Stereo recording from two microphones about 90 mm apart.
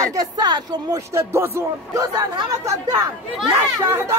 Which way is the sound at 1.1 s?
25° right (ahead or behind).